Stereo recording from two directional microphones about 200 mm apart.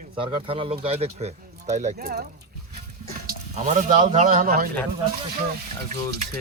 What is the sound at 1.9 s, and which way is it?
Speech, 50° right (ahead or behind).